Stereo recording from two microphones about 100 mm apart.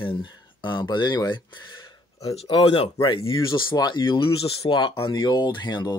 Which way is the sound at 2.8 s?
55° left (ahead or behind).